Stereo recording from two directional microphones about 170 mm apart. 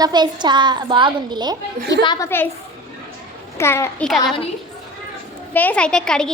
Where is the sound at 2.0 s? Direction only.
25° left (ahead or behind).